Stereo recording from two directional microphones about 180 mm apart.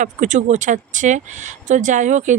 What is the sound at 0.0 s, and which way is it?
Speech, 45° right (ahead or behind).